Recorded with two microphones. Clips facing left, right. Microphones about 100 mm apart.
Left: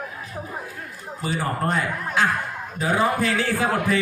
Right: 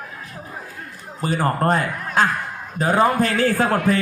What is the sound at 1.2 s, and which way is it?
A man's voice, 50° right (ahead or behind).